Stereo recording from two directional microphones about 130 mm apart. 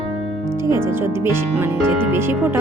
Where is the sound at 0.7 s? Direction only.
20° right (ahead or behind).